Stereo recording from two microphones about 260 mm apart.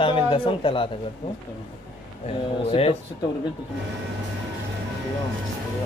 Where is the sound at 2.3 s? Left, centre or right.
Left.